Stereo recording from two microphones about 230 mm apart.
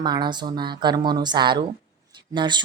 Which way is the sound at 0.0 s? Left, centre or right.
Centre.